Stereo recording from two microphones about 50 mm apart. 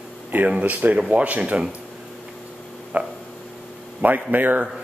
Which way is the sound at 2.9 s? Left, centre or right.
Right.